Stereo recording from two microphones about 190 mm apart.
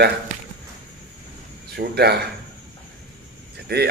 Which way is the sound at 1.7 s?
55° right (ahead or behind).